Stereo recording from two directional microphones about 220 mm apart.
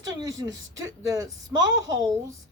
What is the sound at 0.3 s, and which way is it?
Speech, 55° right (ahead or behind).